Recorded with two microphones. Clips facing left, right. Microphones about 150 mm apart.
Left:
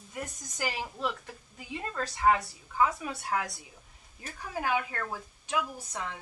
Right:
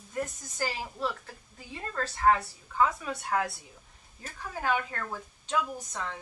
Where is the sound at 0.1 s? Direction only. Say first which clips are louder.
Right 5 dB; 15° left (ahead or behind).